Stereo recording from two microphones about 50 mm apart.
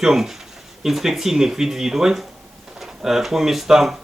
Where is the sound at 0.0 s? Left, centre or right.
Centre.